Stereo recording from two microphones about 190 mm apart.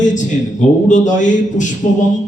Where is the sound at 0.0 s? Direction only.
40° left (ahead or behind).